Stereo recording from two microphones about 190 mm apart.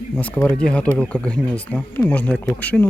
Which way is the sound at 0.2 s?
10° left (ahead or behind).